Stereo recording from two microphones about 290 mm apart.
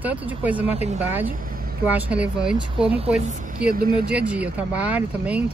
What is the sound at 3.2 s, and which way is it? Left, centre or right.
Speech, right.